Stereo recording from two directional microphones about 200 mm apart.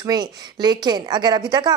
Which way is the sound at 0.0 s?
20° right (ahead or behind).